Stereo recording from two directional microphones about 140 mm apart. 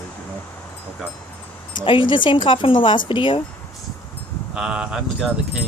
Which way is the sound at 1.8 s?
35° left (ahead or behind).